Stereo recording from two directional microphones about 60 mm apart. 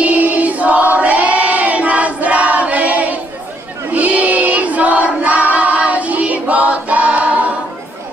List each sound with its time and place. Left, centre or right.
0.0 s choir: right